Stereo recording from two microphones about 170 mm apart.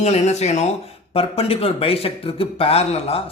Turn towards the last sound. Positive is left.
turn(degrees=35)  # may be behind; listen again after turning